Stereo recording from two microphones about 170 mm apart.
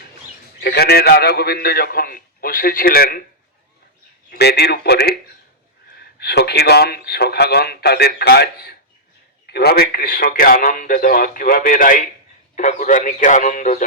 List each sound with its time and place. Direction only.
0.6 s a man's voice: 70° left (ahead or behind)
4.3 s a man's voice: 70° left (ahead or behind); by 13.8 s 50° left (ahead or behind)